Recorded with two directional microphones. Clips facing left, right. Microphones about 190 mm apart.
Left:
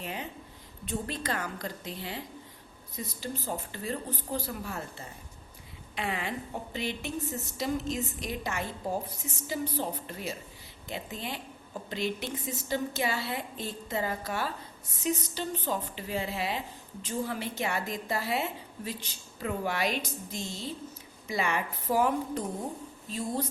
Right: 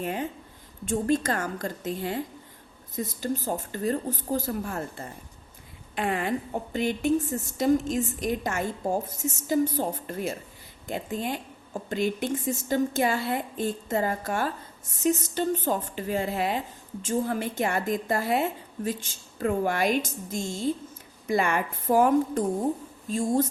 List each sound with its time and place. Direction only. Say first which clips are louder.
0.0 s a woman's voice: right 8 dB; 50° right (ahead or behind)